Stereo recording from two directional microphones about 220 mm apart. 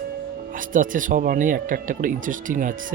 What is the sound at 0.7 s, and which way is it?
Speech, 35° right (ahead or behind).